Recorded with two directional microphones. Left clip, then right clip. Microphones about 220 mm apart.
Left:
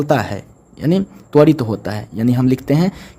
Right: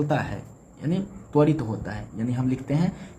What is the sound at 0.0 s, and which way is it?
A man's voice, 50° left (ahead or behind).